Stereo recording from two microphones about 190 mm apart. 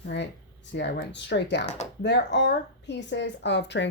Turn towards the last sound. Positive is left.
turn(degrees=70)  # may be behind; listen again after turning